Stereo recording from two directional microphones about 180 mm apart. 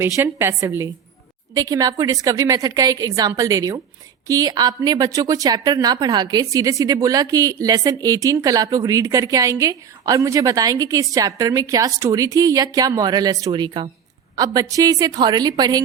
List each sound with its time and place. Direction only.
0.0 s a woman's voice: 15° right (ahead or behind)